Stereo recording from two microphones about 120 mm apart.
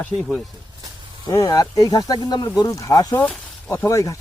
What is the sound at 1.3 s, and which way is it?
Speech, 30° left (ahead or behind).